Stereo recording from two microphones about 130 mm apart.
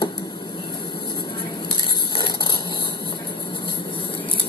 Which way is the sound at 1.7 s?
35° left (ahead or behind).